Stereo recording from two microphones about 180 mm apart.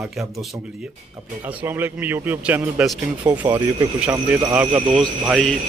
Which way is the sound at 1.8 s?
10° right (ahead or behind).